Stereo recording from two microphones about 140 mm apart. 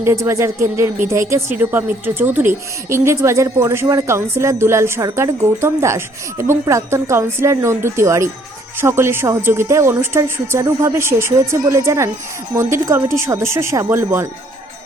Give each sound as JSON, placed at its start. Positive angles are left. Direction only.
{"t": 0.0, "sound": "speech", "side_deg": -20}